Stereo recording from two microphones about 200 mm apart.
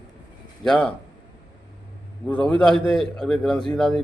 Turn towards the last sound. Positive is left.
turn(degrees=0)  # may be behind; listen again after turning